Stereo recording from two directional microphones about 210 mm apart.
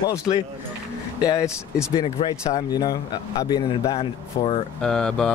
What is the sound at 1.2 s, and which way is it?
Speech, 15° left (ahead or behind).